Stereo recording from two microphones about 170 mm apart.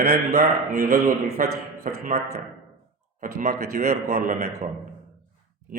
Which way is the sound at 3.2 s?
55° right (ahead or behind).